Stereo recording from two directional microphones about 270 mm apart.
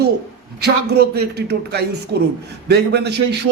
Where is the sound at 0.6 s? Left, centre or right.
Right.